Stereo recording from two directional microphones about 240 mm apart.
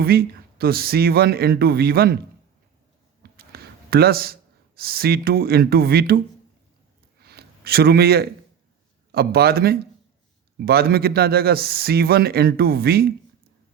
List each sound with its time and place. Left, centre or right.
0.0 s a man's voice: right
3.3 s speech: right
7.2 s a sound: right
9.1 s a man's voice: right